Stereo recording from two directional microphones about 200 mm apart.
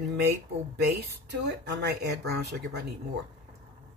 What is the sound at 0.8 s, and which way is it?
Speech, 55° right (ahead or behind).